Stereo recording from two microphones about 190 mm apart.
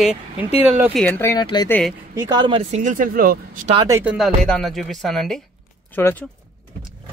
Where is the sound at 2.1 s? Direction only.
25° right (ahead or behind).